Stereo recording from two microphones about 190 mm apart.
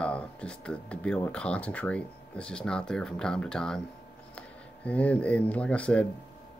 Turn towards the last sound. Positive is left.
turn(degrees=5)  # may be behind; listen again after turning